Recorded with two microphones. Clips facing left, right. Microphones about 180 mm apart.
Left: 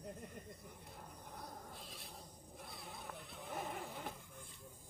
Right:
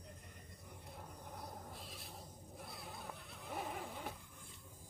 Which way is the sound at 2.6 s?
Centre (ahead or behind).